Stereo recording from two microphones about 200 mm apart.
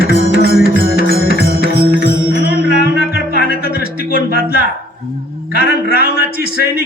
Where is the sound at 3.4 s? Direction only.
45° right (ahead or behind).